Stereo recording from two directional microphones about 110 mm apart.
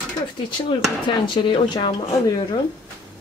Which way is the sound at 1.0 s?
45° left (ahead or behind).